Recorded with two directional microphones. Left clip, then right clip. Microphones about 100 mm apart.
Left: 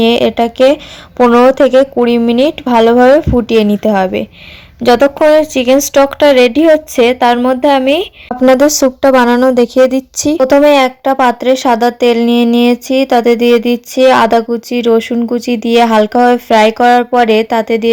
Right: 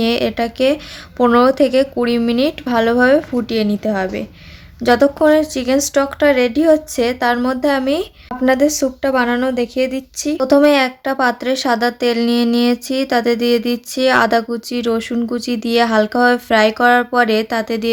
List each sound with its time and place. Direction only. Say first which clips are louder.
0.0 s speech: left 7 dB; 35° left (ahead or behind)
3.4 s a woman's voice: left 8 dB; 60° left (ahead or behind)
4.9 s speech: left 5 dB; 20° left (ahead or behind)
5.4 s speech: left 7 dB; 40° left (ahead or behind)
8.5 s speech: left 7 dB; 70° left (ahead or behind); by 9.5 s 50° left (ahead or behind)
9.6 s speech: left 10 dB; 80° left
10.8 s speech: left 7 dB; 35° left (ahead or behind)